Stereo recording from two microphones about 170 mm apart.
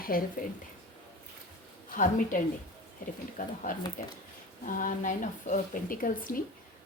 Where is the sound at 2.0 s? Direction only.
50° left (ahead or behind).